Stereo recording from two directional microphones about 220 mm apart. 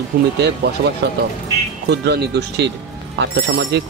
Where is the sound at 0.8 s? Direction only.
40° right (ahead or behind).